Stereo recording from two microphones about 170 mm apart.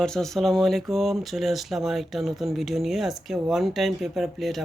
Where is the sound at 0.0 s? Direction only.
5° left (ahead or behind).